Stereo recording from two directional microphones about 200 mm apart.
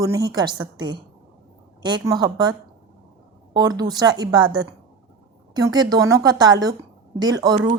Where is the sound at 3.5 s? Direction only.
20° right (ahead or behind).